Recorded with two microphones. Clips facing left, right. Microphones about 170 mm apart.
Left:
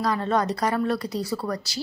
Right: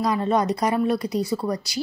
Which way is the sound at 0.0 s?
15° right (ahead or behind).